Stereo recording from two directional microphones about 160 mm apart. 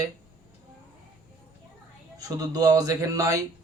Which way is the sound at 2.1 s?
20° right (ahead or behind).